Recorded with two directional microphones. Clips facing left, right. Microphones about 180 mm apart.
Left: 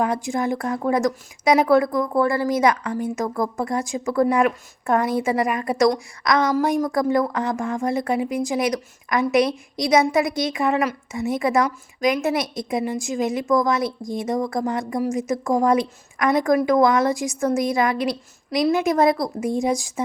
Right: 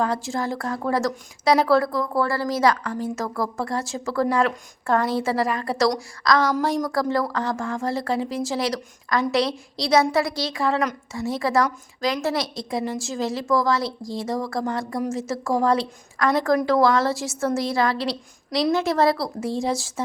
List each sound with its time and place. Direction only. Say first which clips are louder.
0.0 s a woman's voice: left 2 dB; 15° left (ahead or behind)